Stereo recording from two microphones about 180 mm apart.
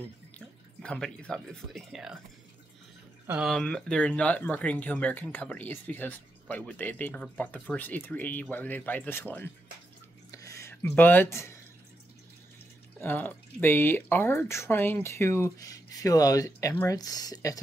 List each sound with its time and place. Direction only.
0.8 s speech: 5° left (ahead or behind)
3.3 s speech: 5° right (ahead or behind)
10.3 s a sound: 20° left (ahead or behind)
13.0 s speech: 10° left (ahead or behind)